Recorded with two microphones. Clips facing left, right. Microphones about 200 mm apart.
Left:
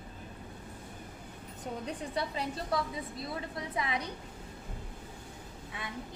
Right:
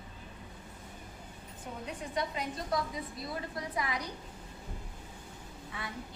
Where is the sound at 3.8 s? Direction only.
25° left (ahead or behind).